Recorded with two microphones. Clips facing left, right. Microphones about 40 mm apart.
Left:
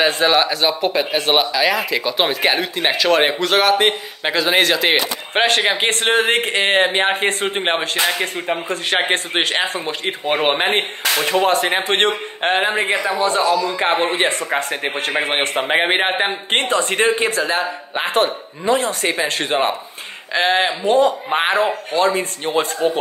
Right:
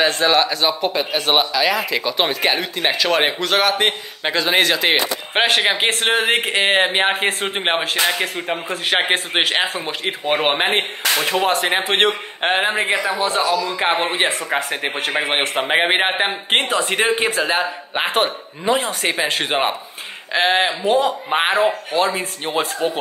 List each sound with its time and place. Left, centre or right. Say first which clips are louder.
0.0 s speech: left 1 dB; centre
17.4 s a man's voice: even; right
18.0 s speech: left 2 dB; centre
20.3 s speech: even; centre